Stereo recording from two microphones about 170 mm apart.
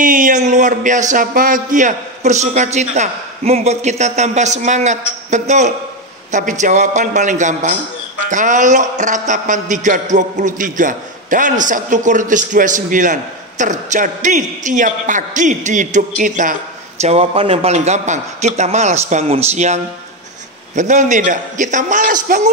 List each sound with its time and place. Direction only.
0.0 s a man's voice: 50° right (ahead or behind)
17.0 s a man's voice: 35° right (ahead or behind)